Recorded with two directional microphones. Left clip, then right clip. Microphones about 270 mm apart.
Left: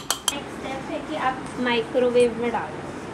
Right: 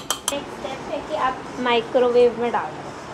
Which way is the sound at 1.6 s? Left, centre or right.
Right.